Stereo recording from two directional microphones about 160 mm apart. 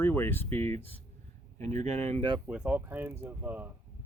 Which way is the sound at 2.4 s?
10° right (ahead or behind).